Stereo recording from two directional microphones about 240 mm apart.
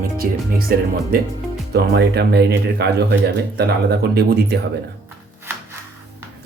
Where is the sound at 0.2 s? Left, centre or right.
Right.